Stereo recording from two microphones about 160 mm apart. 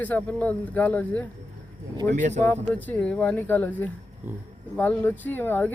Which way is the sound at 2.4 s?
10° left (ahead or behind).